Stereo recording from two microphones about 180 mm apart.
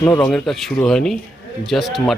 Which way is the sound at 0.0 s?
15° left (ahead or behind).